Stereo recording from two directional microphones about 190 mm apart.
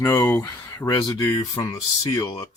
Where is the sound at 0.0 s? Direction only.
10° left (ahead or behind).